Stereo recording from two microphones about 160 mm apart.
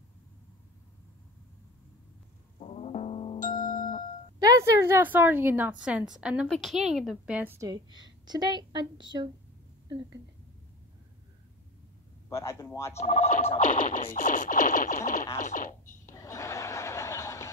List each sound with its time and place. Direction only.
2.6 s music: 40° left (ahead or behind)
3.3 s music: 55° left (ahead or behind)
4.4 s a woman's voice: 20° right (ahead or behind)
7.6 s a woman's voice: 25° right (ahead or behind)
12.3 s speech: 15° left (ahead or behind)
12.9 s speech: 40° left (ahead or behind)
13.7 s scratching: 55° left (ahead or behind)
16.1 s chuckle: 20° left (ahead or behind)